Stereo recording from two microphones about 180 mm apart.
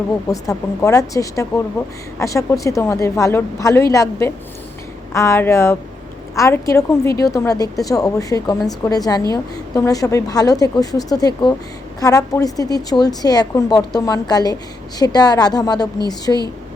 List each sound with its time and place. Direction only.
0.3 s a woman's voice: 20° left (ahead or behind)